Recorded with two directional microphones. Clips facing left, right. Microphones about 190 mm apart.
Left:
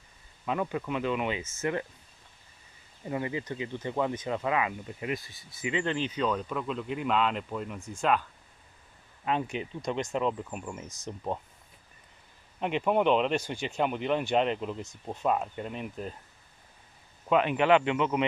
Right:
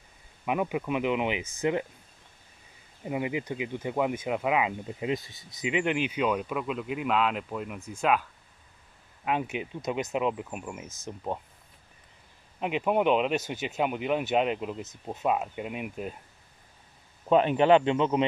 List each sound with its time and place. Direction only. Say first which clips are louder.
0.5 s speech: right 2 dB; 15° right (ahead or behind)
3.0 s speech: right 2 dB; 15° right (ahead or behind)
12.5 s speech: even; 5° right (ahead or behind)
17.3 s speech: right 3 dB; 35° right (ahead or behind)